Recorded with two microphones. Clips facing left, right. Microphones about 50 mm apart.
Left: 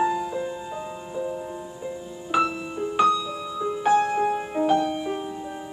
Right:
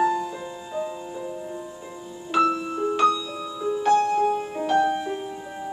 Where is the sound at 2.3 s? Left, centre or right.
Centre.